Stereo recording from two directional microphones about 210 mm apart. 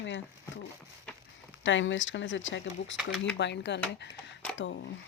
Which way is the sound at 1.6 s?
65° left (ahead or behind).